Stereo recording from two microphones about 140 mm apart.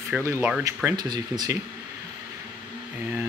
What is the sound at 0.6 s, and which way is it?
Speech, 20° right (ahead or behind).